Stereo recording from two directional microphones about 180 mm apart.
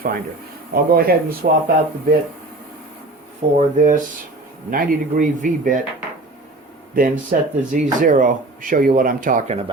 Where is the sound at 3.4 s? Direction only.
35° right (ahead or behind).